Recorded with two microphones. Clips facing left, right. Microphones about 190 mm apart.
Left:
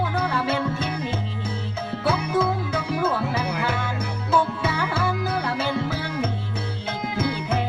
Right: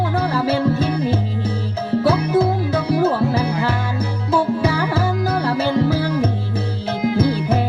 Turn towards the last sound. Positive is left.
turn(degrees=-35)  # may be behind; listen again after turning